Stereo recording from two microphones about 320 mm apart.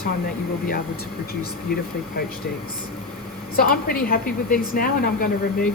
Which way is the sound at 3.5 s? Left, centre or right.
Left.